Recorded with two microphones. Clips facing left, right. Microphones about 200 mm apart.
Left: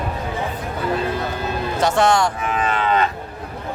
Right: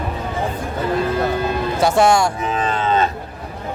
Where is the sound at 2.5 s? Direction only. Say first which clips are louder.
Right 1 dB; 35° right (ahead or behind).